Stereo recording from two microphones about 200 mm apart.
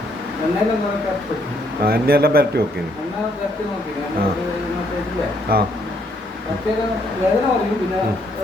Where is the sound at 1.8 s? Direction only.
50° right (ahead or behind).